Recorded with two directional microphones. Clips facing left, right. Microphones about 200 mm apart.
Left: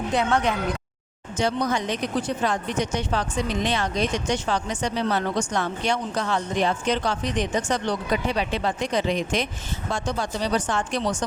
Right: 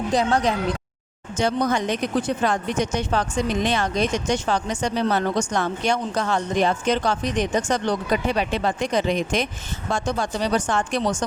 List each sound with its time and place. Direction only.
0.1 s speech: 35° right (ahead or behind)
1.4 s speech: 50° right (ahead or behind)